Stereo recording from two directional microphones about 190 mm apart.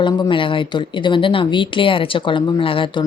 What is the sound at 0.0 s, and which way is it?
Speech, 25° left (ahead or behind).